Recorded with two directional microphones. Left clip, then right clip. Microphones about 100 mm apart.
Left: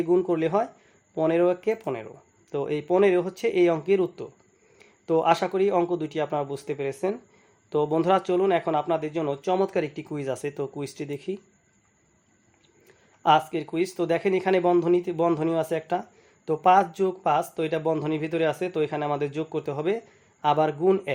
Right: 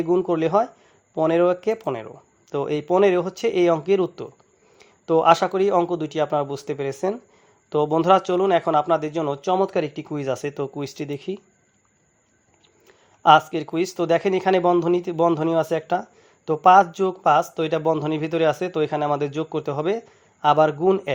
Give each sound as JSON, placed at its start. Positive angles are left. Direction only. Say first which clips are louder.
{"t": 0.0, "sound": "speech", "louder": "right 2 dB", "side_deg": -20}
{"t": 13.2, "sound": "speech", "louder": "right 6 dB", "side_deg": -35}